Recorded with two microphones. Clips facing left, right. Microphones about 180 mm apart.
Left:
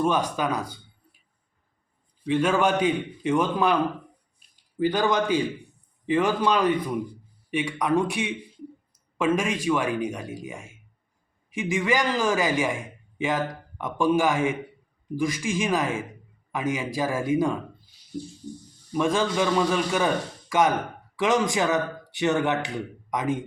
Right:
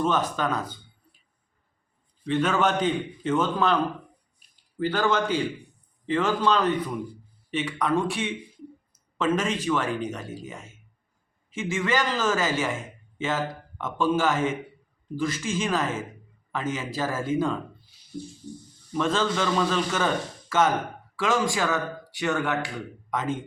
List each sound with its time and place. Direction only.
0.0 s a man's voice: 10° left (ahead or behind)
2.2 s a man's voice: 10° left (ahead or behind)
4.8 s a man's voice: 15° left (ahead or behind)
18.9 s a man's voice: 15° left (ahead or behind)